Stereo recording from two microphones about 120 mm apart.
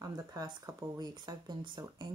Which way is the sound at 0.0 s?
30° right (ahead or behind).